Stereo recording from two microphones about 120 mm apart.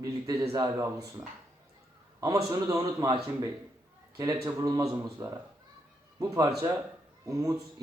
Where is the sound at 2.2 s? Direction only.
30° right (ahead or behind).